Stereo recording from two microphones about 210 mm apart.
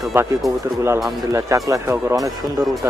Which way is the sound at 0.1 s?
10° right (ahead or behind).